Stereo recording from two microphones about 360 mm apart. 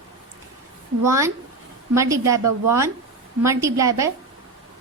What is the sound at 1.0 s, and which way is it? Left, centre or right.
A woman's voice, centre.